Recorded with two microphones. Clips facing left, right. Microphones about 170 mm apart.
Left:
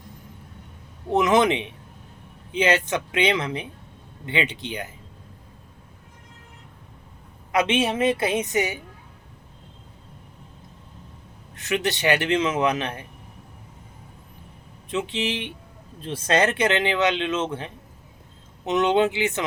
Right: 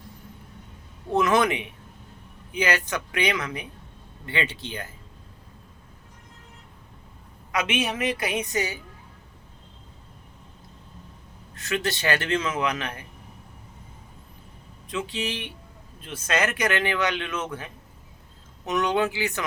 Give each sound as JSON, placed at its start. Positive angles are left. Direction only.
{"t": 1.1, "sound": "speech", "side_deg": 20}
{"t": 7.5, "sound": "speech", "side_deg": 30}
{"t": 11.5, "sound": "speech", "side_deg": 20}
{"t": 14.8, "sound": "speech", "side_deg": 20}
{"t": 16.0, "sound": "speech", "side_deg": 30}